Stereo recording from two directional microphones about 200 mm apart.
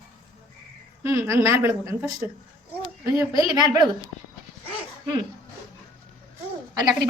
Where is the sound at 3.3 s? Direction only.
20° right (ahead or behind).